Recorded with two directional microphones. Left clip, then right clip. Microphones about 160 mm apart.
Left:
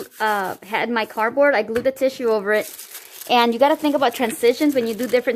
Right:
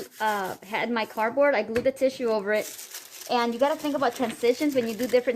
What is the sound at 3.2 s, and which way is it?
Speech, 90° left.